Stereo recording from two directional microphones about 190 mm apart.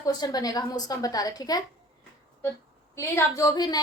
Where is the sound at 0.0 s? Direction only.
20° left (ahead or behind).